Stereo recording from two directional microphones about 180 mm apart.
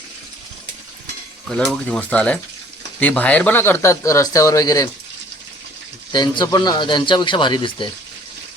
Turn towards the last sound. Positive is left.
turn(degrees=25)  # may be behind; listen again after turning